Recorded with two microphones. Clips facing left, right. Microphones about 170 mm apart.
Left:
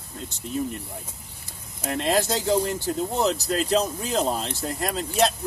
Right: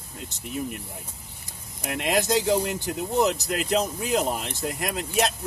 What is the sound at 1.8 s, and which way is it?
Speech, 15° right (ahead or behind).